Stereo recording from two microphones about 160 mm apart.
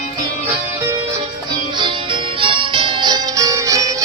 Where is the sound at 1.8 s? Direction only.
30° right (ahead or behind).